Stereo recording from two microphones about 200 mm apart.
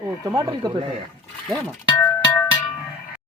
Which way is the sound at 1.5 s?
10° left (ahead or behind).